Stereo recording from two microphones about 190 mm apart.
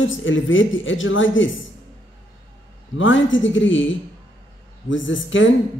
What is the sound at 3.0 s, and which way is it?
Speech, 85° left.